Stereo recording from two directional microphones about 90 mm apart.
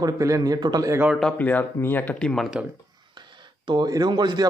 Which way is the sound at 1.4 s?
20° left (ahead or behind).